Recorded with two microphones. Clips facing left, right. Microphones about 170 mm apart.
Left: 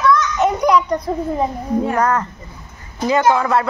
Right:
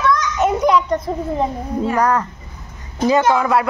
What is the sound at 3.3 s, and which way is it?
Speech, 10° right (ahead or behind).